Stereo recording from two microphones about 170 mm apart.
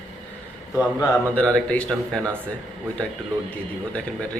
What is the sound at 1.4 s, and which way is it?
Speech, 5° left (ahead or behind).